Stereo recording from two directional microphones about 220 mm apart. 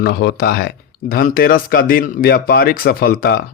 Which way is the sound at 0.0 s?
50° left (ahead or behind).